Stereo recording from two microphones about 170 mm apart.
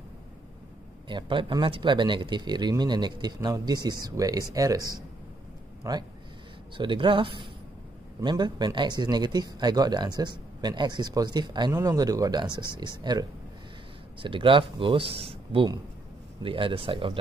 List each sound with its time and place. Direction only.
1.0 s speech: 30° right (ahead or behind)